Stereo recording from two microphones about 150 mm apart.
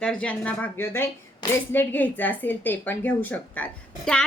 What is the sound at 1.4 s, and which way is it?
Speech, 30° left (ahead or behind).